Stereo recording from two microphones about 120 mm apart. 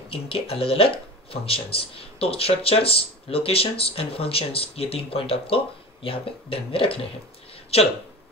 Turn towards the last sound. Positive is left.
turn(degrees=55)  # may be behind; listen again after turning